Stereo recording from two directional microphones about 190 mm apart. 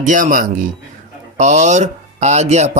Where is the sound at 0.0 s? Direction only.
45° right (ahead or behind).